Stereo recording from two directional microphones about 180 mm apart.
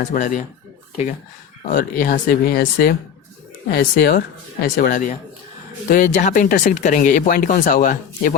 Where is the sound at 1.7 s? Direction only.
50° left (ahead or behind).